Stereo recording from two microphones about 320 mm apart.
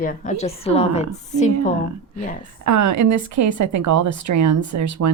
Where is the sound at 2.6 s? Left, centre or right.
Right.